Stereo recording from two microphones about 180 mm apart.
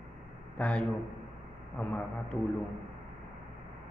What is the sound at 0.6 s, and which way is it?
A man's voice, 5° left (ahead or behind).